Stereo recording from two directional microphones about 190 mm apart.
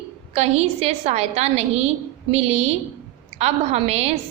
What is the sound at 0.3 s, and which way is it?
A woman's voice, 35° right (ahead or behind).